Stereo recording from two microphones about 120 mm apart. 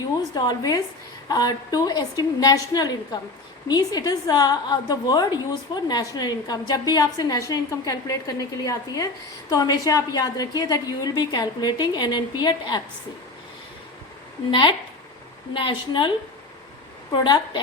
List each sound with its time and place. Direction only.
0.0 s a woman's voice: 35° left (ahead or behind)
14.5 s a woman's voice: 45° left (ahead or behind)